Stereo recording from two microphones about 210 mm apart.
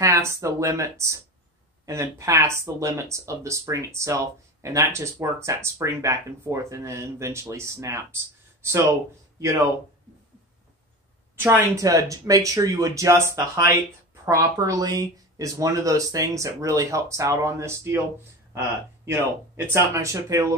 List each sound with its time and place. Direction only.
0.0 s speech: 15° right (ahead or behind)
11.3 s speech: 10° right (ahead or behind)